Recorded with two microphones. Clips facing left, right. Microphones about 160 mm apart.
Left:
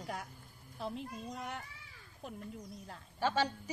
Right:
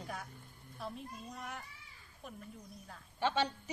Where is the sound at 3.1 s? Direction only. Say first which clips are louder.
Left 1 dB; 10° left (ahead or behind).